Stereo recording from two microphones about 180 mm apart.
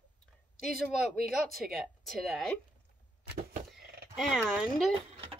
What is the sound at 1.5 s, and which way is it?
Speech, centre (ahead or behind).